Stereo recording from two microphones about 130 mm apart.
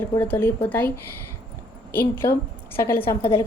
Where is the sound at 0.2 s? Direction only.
15° left (ahead or behind).